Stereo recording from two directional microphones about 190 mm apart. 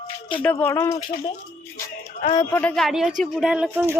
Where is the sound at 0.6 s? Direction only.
15° left (ahead or behind).